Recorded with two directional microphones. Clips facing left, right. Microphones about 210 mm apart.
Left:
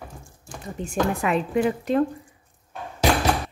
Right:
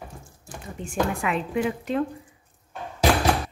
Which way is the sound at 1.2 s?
40° left (ahead or behind).